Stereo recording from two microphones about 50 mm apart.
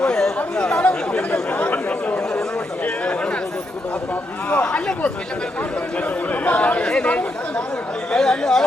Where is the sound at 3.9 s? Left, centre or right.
Left.